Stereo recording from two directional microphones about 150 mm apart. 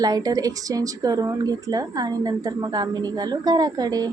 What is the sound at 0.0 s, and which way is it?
Speech, 25° right (ahead or behind).